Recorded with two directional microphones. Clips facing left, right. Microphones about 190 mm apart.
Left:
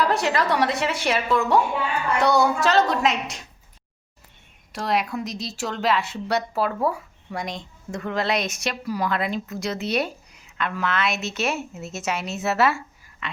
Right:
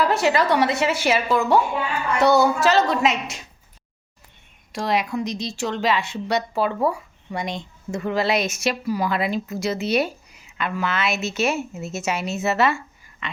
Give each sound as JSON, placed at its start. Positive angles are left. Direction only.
{"t": 0.0, "sound": "speech", "side_deg": 0}
{"t": 4.7, "sound": "speech", "side_deg": 0}